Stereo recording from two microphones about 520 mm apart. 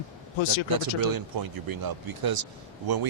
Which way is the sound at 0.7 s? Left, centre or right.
Right.